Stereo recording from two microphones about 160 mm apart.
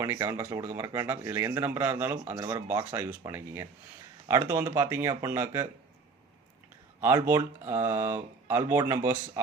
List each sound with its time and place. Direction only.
0.0 s speech: 15° right (ahead or behind)
7.0 s speech: 15° right (ahead or behind)